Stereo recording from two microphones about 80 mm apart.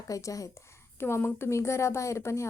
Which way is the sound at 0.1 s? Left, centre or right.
Left.